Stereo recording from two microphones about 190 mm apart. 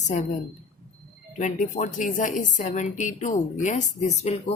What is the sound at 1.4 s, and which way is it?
A woman's voice, 40° left (ahead or behind).